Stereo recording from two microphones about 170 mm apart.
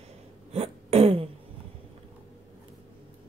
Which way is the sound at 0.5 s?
35° right (ahead or behind).